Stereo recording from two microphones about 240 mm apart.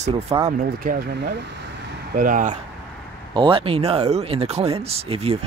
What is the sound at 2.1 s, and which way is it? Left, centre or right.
Speech, right.